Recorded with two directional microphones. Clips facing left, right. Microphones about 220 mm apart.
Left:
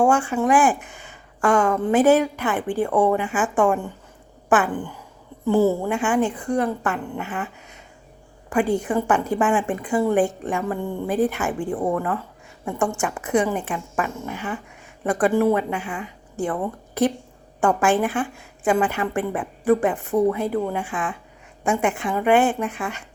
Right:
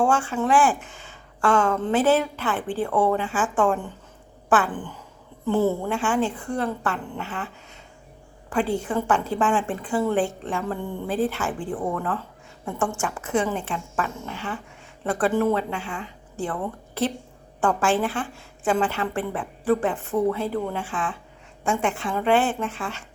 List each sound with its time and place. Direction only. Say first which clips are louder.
0.0 s speech: left 3 dB; 15° left (ahead or behind)